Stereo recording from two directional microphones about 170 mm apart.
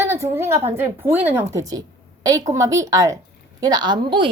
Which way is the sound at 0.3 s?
15° right (ahead or behind).